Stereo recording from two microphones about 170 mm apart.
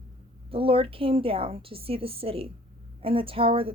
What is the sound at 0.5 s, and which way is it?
Speech, 35° right (ahead or behind).